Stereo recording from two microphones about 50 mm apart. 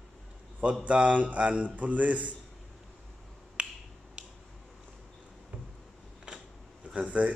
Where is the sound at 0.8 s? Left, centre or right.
Right.